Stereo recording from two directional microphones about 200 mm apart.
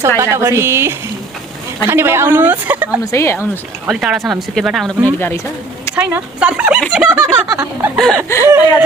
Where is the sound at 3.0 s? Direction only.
15° left (ahead or behind).